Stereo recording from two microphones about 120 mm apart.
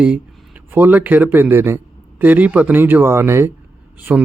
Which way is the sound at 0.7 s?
15° right (ahead or behind).